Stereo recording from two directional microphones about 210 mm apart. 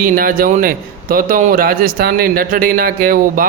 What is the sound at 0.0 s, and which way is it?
Speech, 40° right (ahead or behind).